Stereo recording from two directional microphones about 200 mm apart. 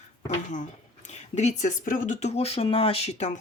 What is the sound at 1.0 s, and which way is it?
Speech, 35° left (ahead or behind).